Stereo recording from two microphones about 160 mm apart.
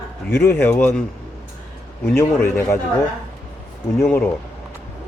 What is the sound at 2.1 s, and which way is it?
Speech, 15° left (ahead or behind).